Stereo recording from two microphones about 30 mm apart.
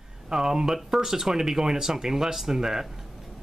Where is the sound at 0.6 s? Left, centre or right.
Centre.